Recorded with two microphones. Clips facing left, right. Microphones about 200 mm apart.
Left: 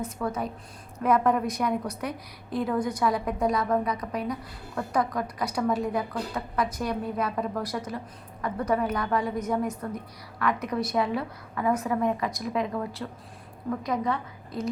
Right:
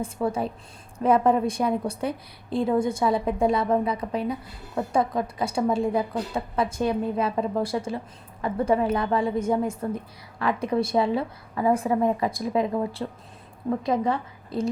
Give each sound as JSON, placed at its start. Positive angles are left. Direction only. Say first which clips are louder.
{"t": 0.0, "sound": "a woman's voice", "louder": "right 4 dB", "side_deg": -30}